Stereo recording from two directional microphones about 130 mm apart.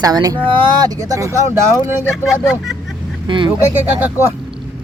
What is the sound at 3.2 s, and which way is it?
Speech, 40° right (ahead or behind).